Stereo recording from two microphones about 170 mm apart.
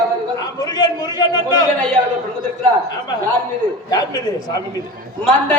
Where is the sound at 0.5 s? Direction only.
25° left (ahead or behind).